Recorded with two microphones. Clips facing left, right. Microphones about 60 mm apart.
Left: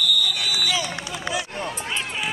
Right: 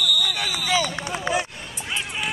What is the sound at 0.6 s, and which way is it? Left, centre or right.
Run, right.